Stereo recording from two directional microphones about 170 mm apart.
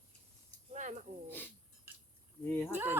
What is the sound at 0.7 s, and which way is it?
Speech, 45° right (ahead or behind).